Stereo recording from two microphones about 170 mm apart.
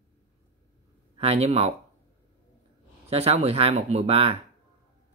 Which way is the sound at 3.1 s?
35° right (ahead or behind).